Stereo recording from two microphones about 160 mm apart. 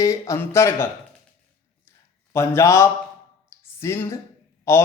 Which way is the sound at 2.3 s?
15° left (ahead or behind).